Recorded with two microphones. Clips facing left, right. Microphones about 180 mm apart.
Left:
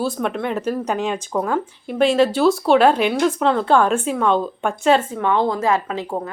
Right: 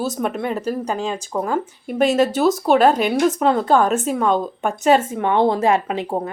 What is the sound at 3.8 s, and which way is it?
Speech, 45° right (ahead or behind).